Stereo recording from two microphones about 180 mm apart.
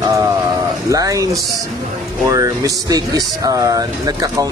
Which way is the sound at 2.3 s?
20° right (ahead or behind).